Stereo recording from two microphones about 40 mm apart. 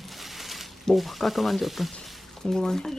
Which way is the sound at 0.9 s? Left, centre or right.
Centre.